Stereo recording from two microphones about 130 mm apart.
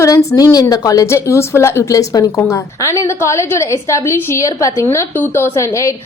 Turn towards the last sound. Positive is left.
turn(degrees=25)  # may be behind; listen again after turning